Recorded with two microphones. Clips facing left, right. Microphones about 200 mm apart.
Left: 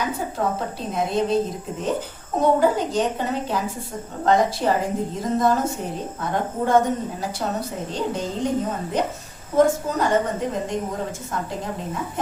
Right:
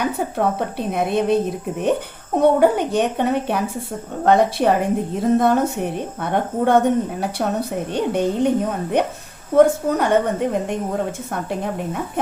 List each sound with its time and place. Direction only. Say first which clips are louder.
0.0 s speech: right 4 dB; 60° right (ahead or behind)